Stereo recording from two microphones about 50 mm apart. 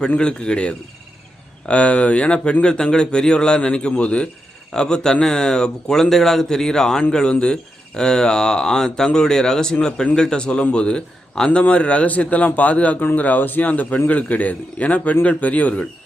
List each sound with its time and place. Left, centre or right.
0.2 s speech: centre